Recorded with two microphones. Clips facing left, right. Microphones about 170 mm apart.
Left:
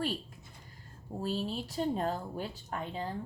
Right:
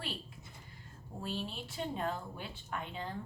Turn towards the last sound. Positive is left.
turn(degrees=35)  # may be behind; listen again after turning